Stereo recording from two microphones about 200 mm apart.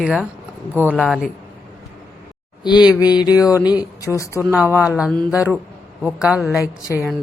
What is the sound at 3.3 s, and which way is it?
Speech, 15° left (ahead or behind).